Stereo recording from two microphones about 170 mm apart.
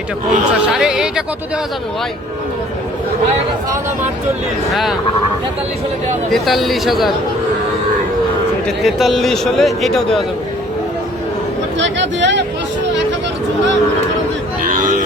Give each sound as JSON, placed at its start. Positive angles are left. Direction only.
{"t": 0.7, "sound": "a man's voice", "side_deg": -5}
{"t": 4.7, "sound": "a man's voice", "side_deg": 0}
{"t": 6.3, "sound": "a man's voice", "side_deg": 0}
{"t": 8.6, "sound": "a man's voice", "side_deg": 0}
{"t": 11.8, "sound": "speech", "side_deg": -90}
{"t": 14.6, "sound": "a sound", "side_deg": -50}